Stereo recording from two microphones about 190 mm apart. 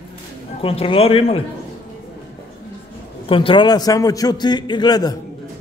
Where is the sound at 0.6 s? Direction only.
30° left (ahead or behind).